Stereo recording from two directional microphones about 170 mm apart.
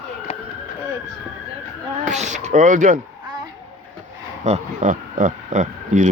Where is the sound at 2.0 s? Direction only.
45° right (ahead or behind).